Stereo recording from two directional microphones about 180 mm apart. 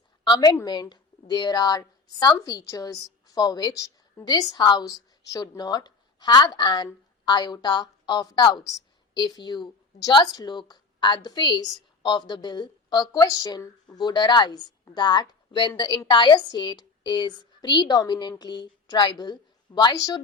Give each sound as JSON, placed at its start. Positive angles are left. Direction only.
{"t": 0.3, "sound": "a woman's voice", "side_deg": 20}